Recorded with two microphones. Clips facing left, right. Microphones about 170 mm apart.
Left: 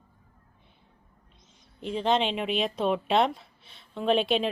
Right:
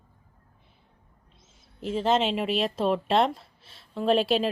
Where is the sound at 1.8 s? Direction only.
5° right (ahead or behind).